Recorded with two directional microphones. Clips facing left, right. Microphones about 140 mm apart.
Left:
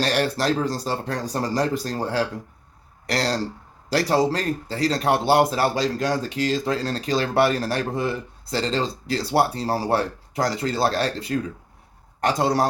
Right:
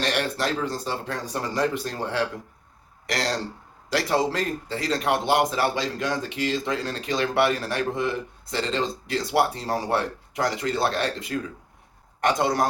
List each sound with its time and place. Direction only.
0.0 s a man's voice: 35° left (ahead or behind)